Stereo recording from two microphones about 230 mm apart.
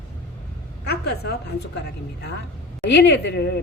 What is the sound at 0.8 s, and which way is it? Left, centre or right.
Speech, left.